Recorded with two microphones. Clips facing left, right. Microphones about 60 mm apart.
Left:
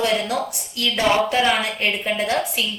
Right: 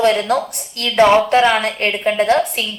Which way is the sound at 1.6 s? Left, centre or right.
Right.